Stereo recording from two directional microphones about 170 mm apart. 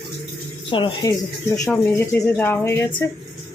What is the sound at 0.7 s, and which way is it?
Speech, 30° left (ahead or behind).